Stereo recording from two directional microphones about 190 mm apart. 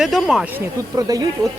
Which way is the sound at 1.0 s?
20° right (ahead or behind).